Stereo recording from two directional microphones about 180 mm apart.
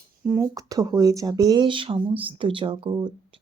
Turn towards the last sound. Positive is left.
turn(degrees=-25)  # may be behind; listen again after turning